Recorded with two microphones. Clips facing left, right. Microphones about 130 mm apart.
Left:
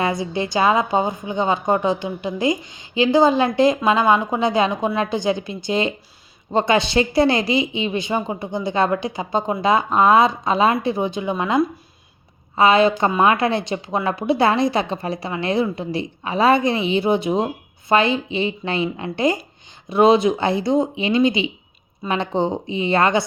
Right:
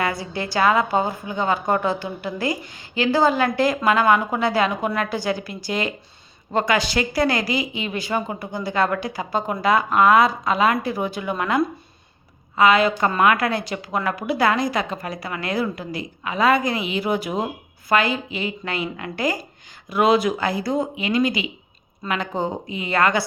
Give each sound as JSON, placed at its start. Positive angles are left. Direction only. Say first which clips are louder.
{"t": 0.0, "sound": "a woman's voice", "louder": "left 3 dB", "side_deg": 20}